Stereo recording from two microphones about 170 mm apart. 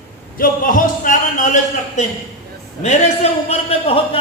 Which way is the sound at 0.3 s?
55° left (ahead or behind).